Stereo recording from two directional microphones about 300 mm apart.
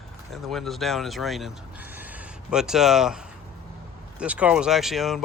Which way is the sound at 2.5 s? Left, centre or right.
Centre.